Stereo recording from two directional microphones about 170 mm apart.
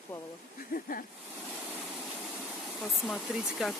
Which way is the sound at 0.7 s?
55° left (ahead or behind).